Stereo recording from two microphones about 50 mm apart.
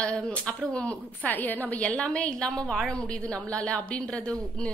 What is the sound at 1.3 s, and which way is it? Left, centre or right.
A woman's voice, left.